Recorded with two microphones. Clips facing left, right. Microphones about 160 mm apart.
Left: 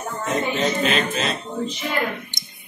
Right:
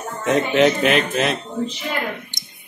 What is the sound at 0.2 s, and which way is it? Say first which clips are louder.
Speech: right 7 dB; 80° right.